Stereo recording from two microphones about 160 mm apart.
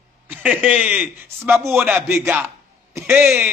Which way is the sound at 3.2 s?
5° right (ahead or behind).